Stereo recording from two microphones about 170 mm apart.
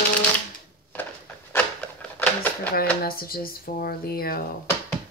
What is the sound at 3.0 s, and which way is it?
A woman's voice, 60° left (ahead or behind).